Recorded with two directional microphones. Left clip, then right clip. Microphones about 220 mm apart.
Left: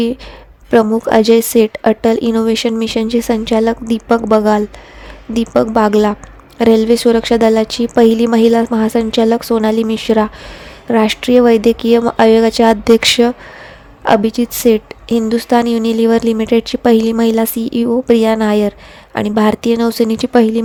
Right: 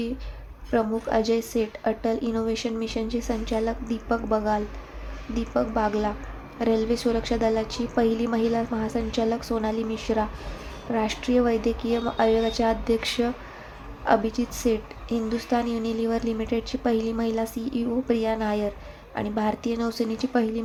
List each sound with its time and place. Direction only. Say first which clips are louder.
0.7 s speech: left 13 dB; 45° left (ahead or behind)